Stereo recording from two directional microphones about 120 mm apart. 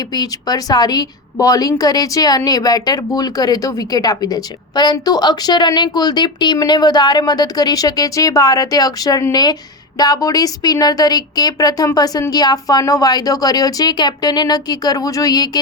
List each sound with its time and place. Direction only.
0.1 s a woman's voice: 35° left (ahead or behind)